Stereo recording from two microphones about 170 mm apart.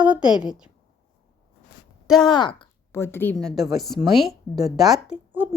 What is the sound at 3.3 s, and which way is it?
A woman's voice, centre (ahead or behind).